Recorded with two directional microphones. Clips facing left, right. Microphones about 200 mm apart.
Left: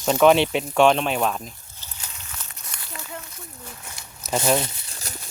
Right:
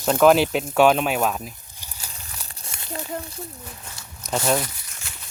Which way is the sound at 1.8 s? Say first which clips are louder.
Right 1 dB; 10° right (ahead or behind).